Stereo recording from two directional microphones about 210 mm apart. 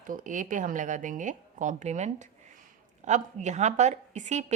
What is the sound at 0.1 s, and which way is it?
A woman's voice, 40° right (ahead or behind).